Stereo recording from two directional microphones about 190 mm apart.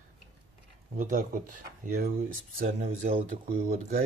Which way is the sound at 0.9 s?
45° right (ahead or behind).